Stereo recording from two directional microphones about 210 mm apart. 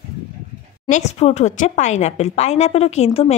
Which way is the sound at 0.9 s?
30° left (ahead or behind).